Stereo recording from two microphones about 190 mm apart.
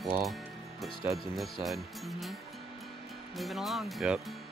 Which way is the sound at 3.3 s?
Centre (ahead or behind).